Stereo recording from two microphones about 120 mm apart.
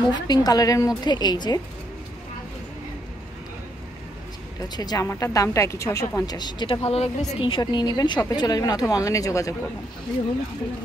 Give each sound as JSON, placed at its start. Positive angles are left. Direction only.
{"t": 0.0, "sound": "speech", "side_deg": 35}
{"t": 4.7, "sound": "a woman's voice", "side_deg": 35}
{"t": 6.8, "sound": "speech", "side_deg": 60}